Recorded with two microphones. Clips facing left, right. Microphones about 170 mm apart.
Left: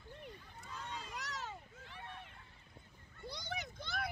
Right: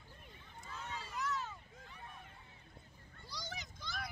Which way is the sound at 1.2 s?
80° left.